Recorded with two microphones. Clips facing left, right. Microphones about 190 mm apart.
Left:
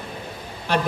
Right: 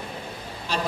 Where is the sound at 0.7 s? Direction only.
60° left (ahead or behind).